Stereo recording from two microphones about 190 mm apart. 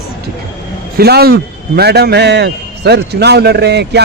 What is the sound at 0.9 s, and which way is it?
A man's voice, 55° right (ahead or behind).